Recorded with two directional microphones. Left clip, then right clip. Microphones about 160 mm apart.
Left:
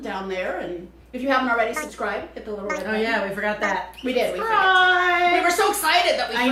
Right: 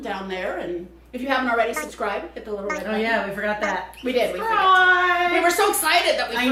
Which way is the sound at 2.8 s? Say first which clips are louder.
Even; 20° left (ahead or behind).